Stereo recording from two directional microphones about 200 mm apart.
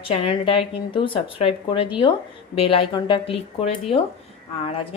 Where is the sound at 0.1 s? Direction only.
25° left (ahead or behind).